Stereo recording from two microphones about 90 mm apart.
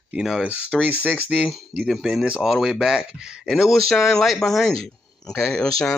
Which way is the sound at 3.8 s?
5° left (ahead or behind).